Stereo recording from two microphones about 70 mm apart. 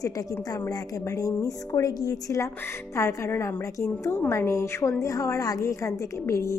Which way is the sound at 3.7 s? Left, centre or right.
Left.